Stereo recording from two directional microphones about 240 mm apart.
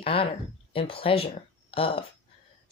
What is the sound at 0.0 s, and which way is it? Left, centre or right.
Speech, left.